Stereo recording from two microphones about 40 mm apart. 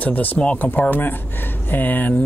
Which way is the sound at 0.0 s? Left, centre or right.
Left.